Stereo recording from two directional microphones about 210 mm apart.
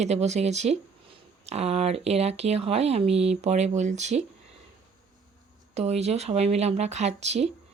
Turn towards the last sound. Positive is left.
turn(degrees=-30)  # may be behind; listen again after turning